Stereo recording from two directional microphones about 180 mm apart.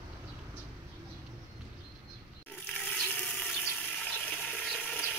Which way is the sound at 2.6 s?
5° left (ahead or behind).